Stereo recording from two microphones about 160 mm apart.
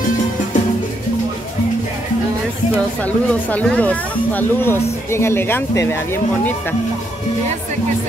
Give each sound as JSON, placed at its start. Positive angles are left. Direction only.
{"t": 3.0, "sound": "speech", "side_deg": 10}